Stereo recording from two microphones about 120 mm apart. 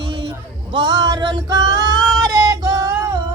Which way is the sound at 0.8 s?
35° right (ahead or behind).